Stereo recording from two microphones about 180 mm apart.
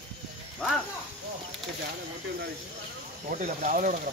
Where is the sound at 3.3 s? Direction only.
45° right (ahead or behind).